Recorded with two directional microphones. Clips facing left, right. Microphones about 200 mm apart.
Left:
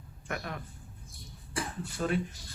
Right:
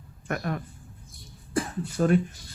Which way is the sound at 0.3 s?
50° right (ahead or behind).